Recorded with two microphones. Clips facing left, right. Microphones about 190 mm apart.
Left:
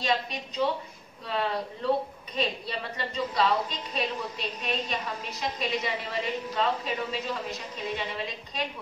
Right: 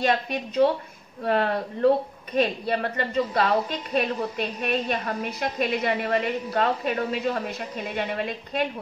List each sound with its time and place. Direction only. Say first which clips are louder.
0.0 s a woman's voice: right 5 dB; 55° right (ahead or behind)